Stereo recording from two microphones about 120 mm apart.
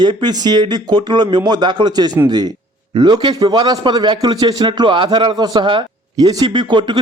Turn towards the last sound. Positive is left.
turn(degrees=-40)  # may be behind; listen again after turning